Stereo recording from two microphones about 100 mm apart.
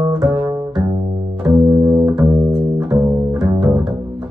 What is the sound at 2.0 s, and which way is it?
Music, 10° right (ahead or behind).